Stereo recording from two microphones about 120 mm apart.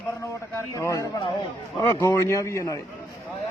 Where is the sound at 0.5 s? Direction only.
25° left (ahead or behind).